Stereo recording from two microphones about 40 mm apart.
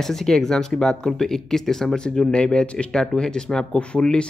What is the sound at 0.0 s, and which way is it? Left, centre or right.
Speech, centre.